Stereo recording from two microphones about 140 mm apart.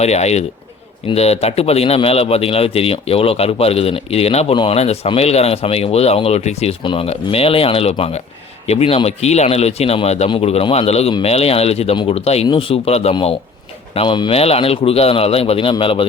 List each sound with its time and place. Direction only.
0.0 s speech: 50° left (ahead or behind)